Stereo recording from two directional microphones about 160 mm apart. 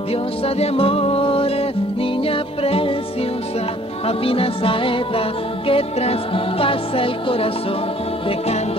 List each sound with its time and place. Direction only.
0.1 s music: 35° left (ahead or behind)
4.2 s music: 35° left (ahead or behind)